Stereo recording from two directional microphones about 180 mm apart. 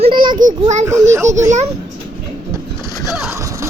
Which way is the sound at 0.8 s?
15° right (ahead or behind).